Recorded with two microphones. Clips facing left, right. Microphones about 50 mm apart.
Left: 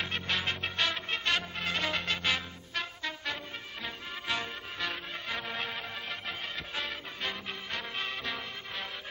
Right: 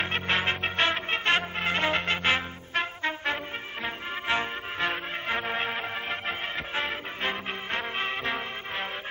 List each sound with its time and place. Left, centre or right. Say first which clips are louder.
0.0 s music: right 6 dB; right